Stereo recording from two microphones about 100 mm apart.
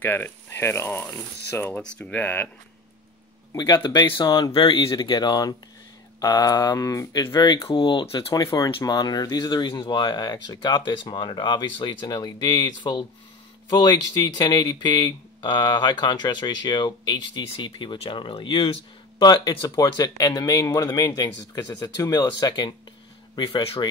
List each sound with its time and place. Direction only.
0.0 s speech: 20° left (ahead or behind)
1.8 s speech: 10° left (ahead or behind)
3.5 s speech: 45° left (ahead or behind)
4.3 s speech: 40° left (ahead or behind)
4.6 s speech: 55° left (ahead or behind)
7.6 s speech: 55° left (ahead or behind)
8.3 s speech: 35° left (ahead or behind)
8.8 s speech: 45° left (ahead or behind); by 19.2 s 60° left (ahead or behind)
19.2 s speech: 45° left (ahead or behind)